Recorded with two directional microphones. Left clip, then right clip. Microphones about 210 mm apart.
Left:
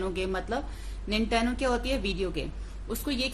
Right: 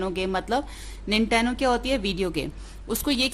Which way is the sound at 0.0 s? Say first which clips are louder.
Right 4 dB; 30° right (ahead or behind).